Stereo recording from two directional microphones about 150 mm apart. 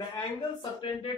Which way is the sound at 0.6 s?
35° left (ahead or behind).